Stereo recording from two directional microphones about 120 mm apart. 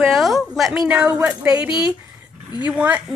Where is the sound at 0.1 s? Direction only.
Centre (ahead or behind).